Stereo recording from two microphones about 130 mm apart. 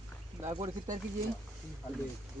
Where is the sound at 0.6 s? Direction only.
75° right (ahead or behind).